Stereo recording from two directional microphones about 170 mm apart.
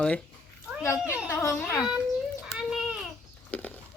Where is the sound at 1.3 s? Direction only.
15° left (ahead or behind).